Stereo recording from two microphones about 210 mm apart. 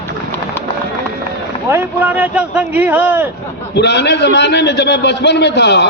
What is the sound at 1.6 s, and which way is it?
Speech, 10° right (ahead or behind).